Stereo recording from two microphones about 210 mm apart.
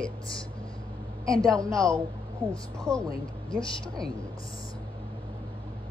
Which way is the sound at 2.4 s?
10° left (ahead or behind).